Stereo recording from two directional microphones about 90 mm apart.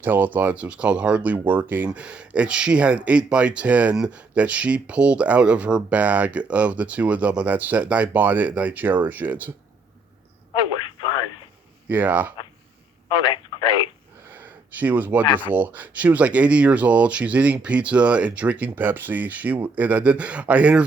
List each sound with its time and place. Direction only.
0.0 s speech: 20° right (ahead or behind)
11.9 s speech: 20° right (ahead or behind)
13.1 s telephone: 60° left (ahead or behind)
14.3 s a sound: 20° right (ahead or behind)
15.5 s speech: 20° right (ahead or behind)